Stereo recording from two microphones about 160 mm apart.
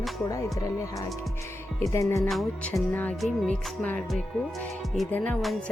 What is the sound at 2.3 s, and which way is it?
Speech, centre (ahead or behind).